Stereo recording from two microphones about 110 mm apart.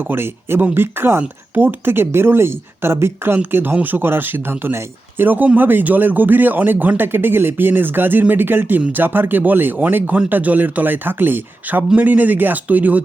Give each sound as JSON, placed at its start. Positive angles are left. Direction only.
{"t": 0.1, "sound": "speech", "side_deg": -20}